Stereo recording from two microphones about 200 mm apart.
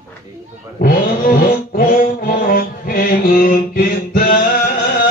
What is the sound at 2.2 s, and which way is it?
Mantra, 45° left (ahead or behind).